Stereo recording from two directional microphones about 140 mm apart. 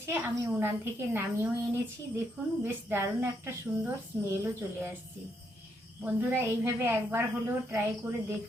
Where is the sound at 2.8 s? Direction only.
15° right (ahead or behind).